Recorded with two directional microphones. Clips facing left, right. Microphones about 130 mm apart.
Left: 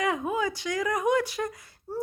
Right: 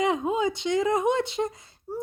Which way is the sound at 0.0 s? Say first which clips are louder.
Right 3 dB; 25° right (ahead or behind).